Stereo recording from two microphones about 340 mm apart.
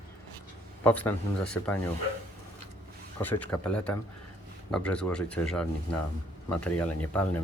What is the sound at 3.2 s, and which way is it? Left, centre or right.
Speech, centre.